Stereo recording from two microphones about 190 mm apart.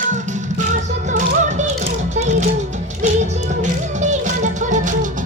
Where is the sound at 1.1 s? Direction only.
40° right (ahead or behind).